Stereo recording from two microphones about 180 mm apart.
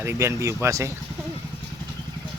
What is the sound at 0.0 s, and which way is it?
Speech, 15° right (ahead or behind).